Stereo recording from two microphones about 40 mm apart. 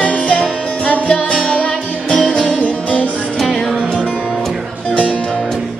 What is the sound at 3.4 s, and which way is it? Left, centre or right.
Music, centre.